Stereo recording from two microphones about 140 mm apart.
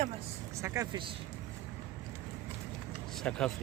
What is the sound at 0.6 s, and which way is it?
Speech, 20° right (ahead or behind).